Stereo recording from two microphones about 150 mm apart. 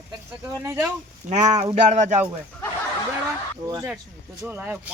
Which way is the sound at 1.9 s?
55° right (ahead or behind).